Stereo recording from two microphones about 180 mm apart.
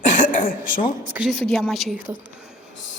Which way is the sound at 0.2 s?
50° left (ahead or behind).